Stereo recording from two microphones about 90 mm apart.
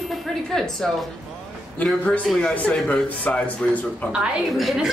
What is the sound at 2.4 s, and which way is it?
Speech, 10° left (ahead or behind).